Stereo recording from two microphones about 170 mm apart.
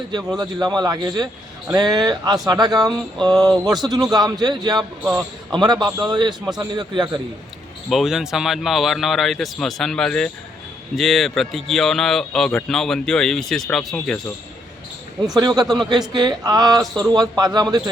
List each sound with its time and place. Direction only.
0.3 s a man's voice: 25° right (ahead or behind)
4.8 s speech: 5° right (ahead or behind)
5.5 s a man's voice: 25° right (ahead or behind)
7.9 s speech: centre (ahead or behind)
15.4 s a man's voice: 20° right (ahead or behind)